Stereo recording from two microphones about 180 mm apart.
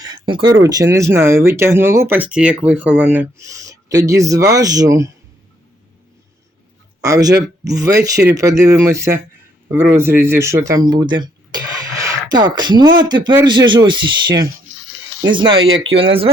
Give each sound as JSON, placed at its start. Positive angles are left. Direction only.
{"t": 0.0, "sound": "a sound", "side_deg": -25}
{"t": 0.5, "sound": "speech", "side_deg": -20}
{"t": 7.0, "sound": "speech", "side_deg": -20}